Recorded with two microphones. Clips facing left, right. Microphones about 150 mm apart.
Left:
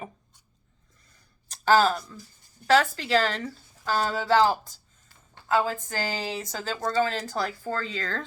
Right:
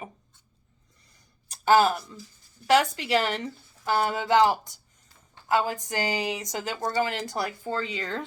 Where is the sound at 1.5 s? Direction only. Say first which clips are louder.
Right 1 dB; 10° right (ahead or behind).